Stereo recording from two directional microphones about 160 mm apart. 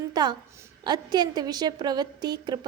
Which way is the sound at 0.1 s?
25° right (ahead or behind).